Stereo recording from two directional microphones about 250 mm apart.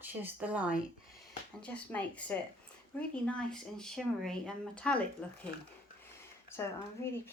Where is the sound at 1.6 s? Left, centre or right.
Centre.